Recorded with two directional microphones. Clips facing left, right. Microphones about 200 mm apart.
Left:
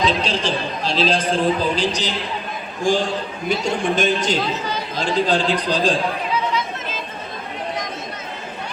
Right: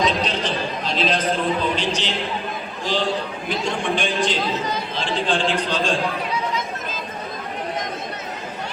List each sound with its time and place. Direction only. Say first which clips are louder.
0.0 s a man's voice: left 1 dB; 30° left (ahead or behind)
2.9 s a man's voice: left 3 dB; 50° left (ahead or behind)